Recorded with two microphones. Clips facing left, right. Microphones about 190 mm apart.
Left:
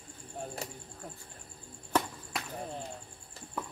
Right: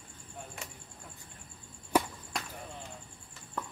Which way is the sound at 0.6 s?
35° left (ahead or behind).